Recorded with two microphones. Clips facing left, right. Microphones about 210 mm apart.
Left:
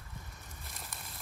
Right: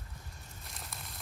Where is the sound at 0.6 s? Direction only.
Centre (ahead or behind).